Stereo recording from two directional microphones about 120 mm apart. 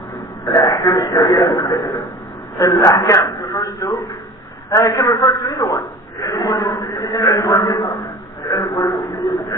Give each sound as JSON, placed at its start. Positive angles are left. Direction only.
{"t": 0.5, "sound": "a man's voice", "side_deg": 30}